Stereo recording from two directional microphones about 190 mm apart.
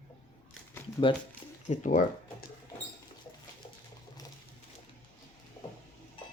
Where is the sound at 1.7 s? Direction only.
40° left (ahead or behind).